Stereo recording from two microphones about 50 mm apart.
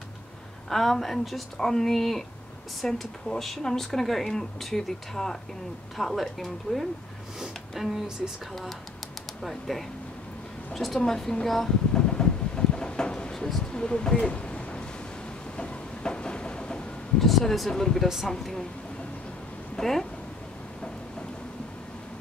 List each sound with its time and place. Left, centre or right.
0.7 s speech: centre
9.4 s speech: centre
11.9 s a sound: centre
15.5 s train: left
17.2 s speech: centre
18.0 s speech: centre
18.3 s speech: centre
19.8 s speech: centre